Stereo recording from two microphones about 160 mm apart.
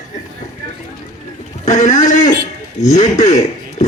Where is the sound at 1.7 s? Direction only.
50° left (ahead or behind).